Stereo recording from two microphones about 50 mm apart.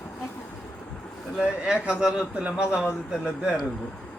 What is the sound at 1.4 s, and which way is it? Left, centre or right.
Speech, right.